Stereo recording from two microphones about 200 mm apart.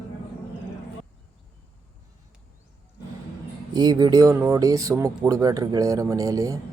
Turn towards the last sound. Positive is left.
turn(degrees=-15)  # may be behind; listen again after turning